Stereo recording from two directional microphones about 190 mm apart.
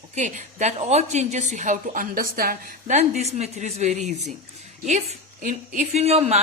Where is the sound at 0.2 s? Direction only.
40° right (ahead or behind).